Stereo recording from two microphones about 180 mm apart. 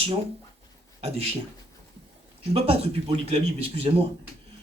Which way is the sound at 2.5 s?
35° right (ahead or behind).